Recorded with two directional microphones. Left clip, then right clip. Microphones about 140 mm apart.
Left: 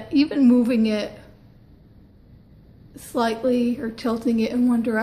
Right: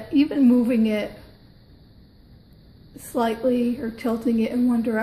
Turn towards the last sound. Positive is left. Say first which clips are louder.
# left 1 dB
turn(degrees=-15)  # may be behind; listen again after turning